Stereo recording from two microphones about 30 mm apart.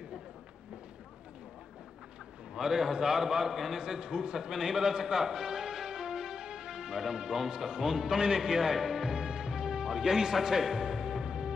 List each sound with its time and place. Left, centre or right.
2.5 s a man's voice: centre
3.8 s a man's voice: right
4.4 s a man's voice: centre
9.1 s music: right